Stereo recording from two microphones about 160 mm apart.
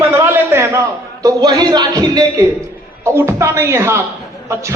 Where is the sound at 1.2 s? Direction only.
25° right (ahead or behind).